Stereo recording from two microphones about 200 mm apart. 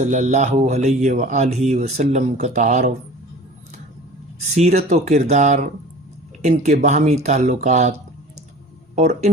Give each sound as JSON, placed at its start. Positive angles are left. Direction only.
{"t": 0.0, "sound": "speech", "side_deg": -40}
{"t": 4.5, "sound": "speech", "side_deg": -35}
{"t": 9.0, "sound": "speech", "side_deg": -35}